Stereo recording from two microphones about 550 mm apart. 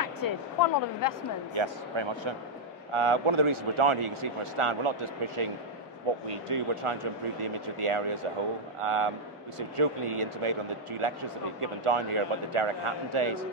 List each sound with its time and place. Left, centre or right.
0.0 s speech: left
1.5 s speech: right